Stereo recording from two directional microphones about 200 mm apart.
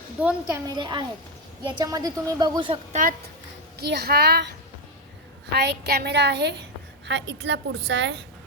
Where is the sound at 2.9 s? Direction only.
40° right (ahead or behind).